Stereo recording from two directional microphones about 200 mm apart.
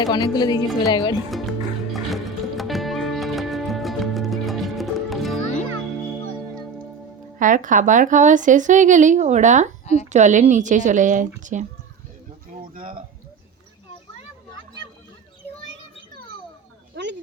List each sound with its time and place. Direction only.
0.0 s speech: 20° left (ahead or behind)
1.9 s music: centre (ahead or behind)
7.3 s a woman's voice: 40° right (ahead or behind)
9.8 s a woman's voice: 35° left (ahead or behind)
10.1 s a woman's voice: 35° right (ahead or behind)
12.7 s speech: 45° right (ahead or behind)
16.9 s a sound: 60° right (ahead or behind)